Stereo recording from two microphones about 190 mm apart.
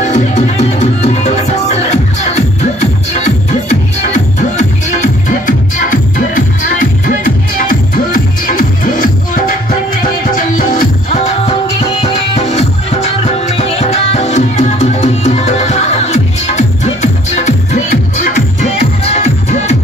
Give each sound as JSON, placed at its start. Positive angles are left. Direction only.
{"t": 0.0, "sound": "music", "side_deg": 40}